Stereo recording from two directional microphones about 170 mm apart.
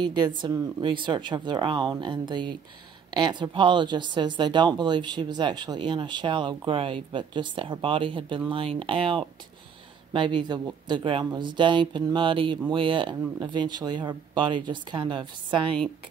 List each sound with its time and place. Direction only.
0.0 s speech: 25° right (ahead or behind)